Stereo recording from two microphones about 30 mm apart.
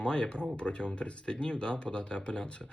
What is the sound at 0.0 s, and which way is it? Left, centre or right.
Speech, left.